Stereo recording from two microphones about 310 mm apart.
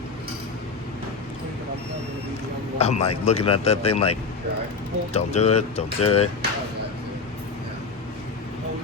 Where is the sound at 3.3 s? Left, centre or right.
Centre.